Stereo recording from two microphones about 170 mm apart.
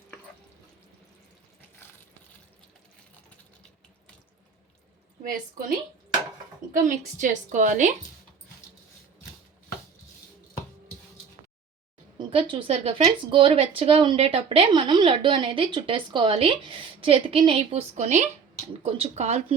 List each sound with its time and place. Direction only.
6.8 s a woman's voice: 50° right (ahead or behind)
12.1 s speech: 30° right (ahead or behind)